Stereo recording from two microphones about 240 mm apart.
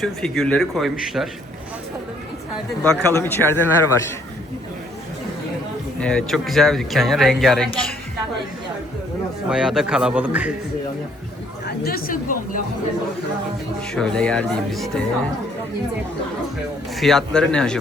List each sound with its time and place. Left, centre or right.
0.0 s speech: centre
2.8 s a man's voice: centre
6.0 s speech: centre
9.5 s speech: centre
11.8 s a woman's voice: left
13.9 s speech: centre
16.9 s speech: centre